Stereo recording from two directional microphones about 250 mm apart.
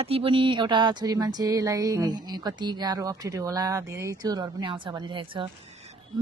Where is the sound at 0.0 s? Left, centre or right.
Right.